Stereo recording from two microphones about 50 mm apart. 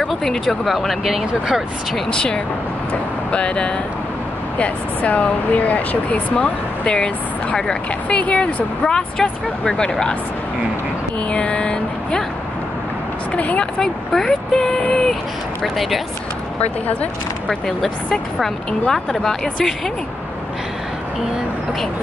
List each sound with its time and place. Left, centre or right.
0.1 s speech: centre
2.0 s speech: centre
8.2 s speech: left
11.2 s vehicle: left
13.4 s speech: left
13.7 s speech: centre
15.6 s speech: centre
17.5 s speech: centre